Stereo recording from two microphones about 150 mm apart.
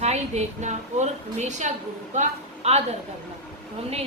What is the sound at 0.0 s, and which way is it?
A woman's voice, 50° right (ahead or behind).